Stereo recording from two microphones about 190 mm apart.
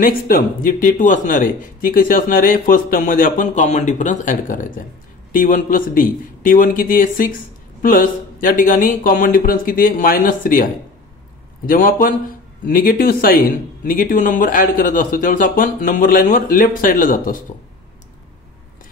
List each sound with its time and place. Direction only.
0.0 s a man's voice: 50° left (ahead or behind)